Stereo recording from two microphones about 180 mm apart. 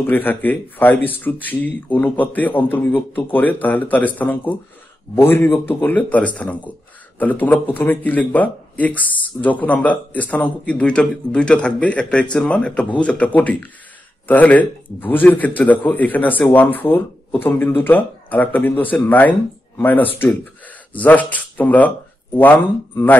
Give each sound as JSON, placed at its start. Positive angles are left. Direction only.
{"t": 0.0, "sound": "speech", "side_deg": 10}